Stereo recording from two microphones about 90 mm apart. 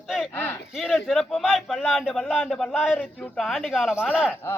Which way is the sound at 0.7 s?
Centre (ahead or behind).